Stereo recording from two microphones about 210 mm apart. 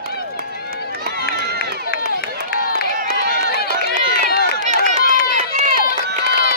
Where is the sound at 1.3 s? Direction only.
50° right (ahead or behind).